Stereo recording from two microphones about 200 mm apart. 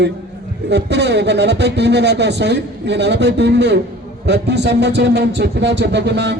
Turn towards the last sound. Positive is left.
turn(degrees=-60)  # may be behind; listen again after turning